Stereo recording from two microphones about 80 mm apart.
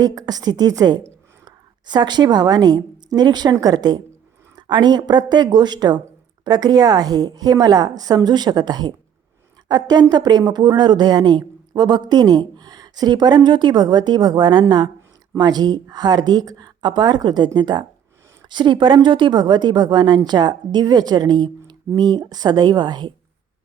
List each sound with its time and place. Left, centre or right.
0.0 s a woman's voice: right
4.5 s speech: right
18.4 s speech: right